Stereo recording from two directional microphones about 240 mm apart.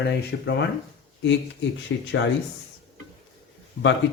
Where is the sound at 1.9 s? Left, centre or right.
Left.